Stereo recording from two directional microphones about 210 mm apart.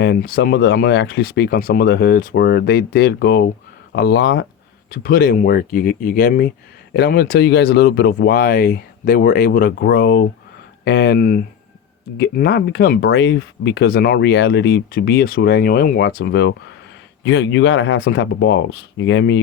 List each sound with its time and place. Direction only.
0.0 s speech: 50° left (ahead or behind)
4.9 s speech: 45° left (ahead or behind)